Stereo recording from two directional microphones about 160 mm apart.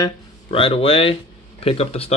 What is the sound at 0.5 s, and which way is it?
Speech, 35° left (ahead or behind).